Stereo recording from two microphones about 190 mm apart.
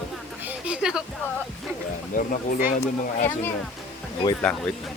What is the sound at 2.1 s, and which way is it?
Speech, 45° left (ahead or behind).